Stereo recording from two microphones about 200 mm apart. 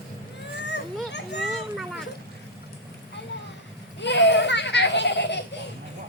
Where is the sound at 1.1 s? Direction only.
60° left (ahead or behind).